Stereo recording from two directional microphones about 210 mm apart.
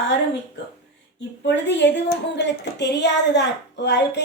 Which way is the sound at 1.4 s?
60° left (ahead or behind).